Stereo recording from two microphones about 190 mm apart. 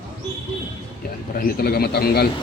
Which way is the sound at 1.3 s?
50° left (ahead or behind).